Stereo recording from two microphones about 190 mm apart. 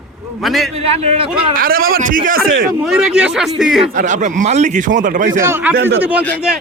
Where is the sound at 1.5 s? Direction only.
50° right (ahead or behind).